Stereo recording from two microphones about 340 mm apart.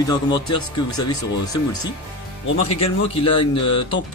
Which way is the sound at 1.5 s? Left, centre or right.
Left.